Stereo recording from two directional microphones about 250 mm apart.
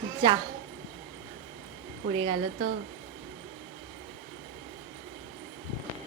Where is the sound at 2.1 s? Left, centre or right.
Right.